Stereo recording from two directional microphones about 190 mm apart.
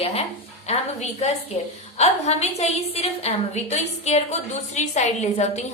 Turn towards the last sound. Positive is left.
turn(degrees=35)  # may be behind; listen again after turning